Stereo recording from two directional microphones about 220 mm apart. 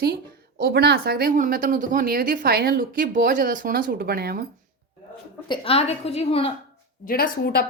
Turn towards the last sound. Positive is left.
turn(degrees=45)  # may be behind; listen again after turning